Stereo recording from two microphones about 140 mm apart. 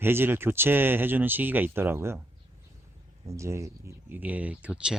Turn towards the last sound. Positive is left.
turn(degrees=-5)  # may be behind; listen again after turning